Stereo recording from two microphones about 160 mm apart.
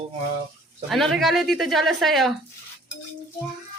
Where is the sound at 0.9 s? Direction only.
Centre (ahead or behind).